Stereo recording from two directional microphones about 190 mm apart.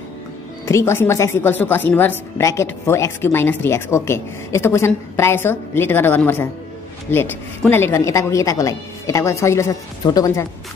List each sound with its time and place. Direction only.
0.7 s a woman's voice: 15° left (ahead or behind)